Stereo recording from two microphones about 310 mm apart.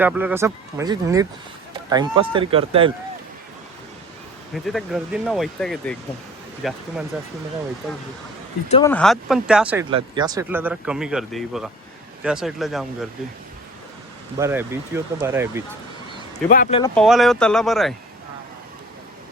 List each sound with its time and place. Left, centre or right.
0.0 s speech: centre
4.5 s speech: centre
8.7 s speech: centre
14.3 s speech: centre
16.5 s speech: left
16.9 s speech: centre